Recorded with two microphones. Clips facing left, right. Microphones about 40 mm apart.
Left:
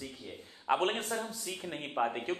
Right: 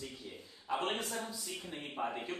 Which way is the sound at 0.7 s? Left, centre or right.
Left.